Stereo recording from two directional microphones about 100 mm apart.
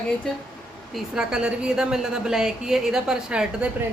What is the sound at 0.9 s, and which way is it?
A woman's voice, 5° right (ahead or behind).